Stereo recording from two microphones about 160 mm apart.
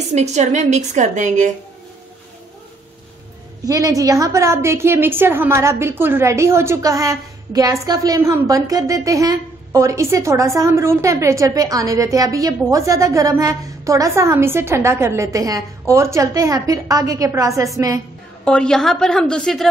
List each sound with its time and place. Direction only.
0.1 s a woman's voice: 45° right (ahead or behind)
3.6 s a woman's voice: 20° right (ahead or behind)
18.4 s a woman's voice: 5° left (ahead or behind)